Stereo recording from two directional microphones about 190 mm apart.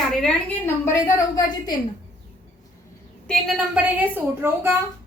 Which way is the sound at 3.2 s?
Centre (ahead or behind).